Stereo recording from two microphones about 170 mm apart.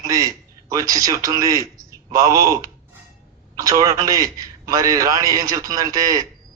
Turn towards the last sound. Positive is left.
turn(degrees=-20)  # may be behind; listen again after turning